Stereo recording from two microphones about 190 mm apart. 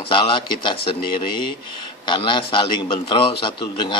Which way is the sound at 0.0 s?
25° left (ahead or behind).